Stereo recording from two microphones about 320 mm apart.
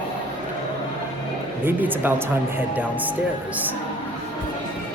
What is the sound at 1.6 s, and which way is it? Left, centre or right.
Speech, centre.